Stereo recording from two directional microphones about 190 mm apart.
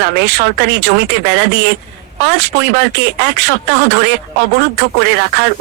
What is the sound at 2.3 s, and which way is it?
Speech, 65° right (ahead or behind).